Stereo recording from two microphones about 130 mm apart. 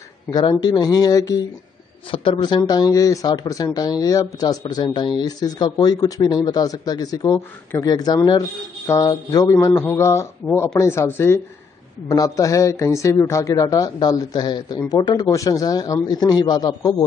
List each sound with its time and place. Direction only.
0.3 s speech: 35° left (ahead or behind)
2.0 s speech: 40° left (ahead or behind)